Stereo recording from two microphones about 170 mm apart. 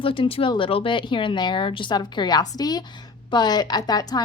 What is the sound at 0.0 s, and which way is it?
A woman's voice, 30° left (ahead or behind).